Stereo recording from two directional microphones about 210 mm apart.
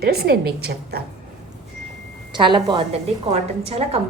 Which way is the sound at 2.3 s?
20° right (ahead or behind).